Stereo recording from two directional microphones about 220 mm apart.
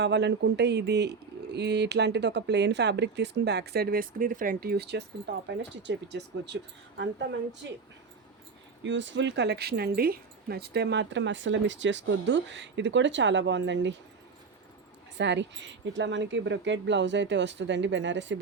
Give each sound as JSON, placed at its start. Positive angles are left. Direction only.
{"t": 0.0, "sound": "speech", "side_deg": -50}
{"t": 8.8, "sound": "speech", "side_deg": -55}
{"t": 15.2, "sound": "speech", "side_deg": -55}